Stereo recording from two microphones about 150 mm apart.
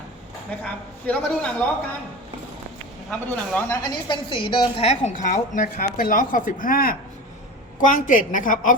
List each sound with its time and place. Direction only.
0.6 s a man's voice: 10° left (ahead or behind)
3.1 s a man's voice: 10° left (ahead or behind)
4.1 s a woman's voice: 35° left (ahead or behind); by 6.9 s 70° left (ahead or behind)
7.9 s a woman's voice: 60° left (ahead or behind)